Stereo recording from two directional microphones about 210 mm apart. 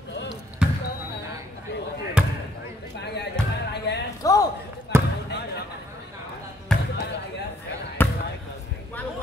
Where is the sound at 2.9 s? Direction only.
55° left (ahead or behind).